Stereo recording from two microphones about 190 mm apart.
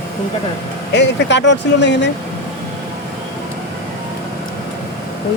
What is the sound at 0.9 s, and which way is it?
Speech, 65° left (ahead or behind).